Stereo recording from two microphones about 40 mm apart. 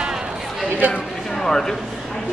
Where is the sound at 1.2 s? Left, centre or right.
Centre.